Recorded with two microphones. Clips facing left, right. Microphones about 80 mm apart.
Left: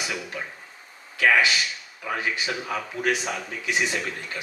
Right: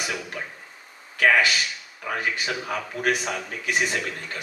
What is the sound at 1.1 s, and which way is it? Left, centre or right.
Speech, right.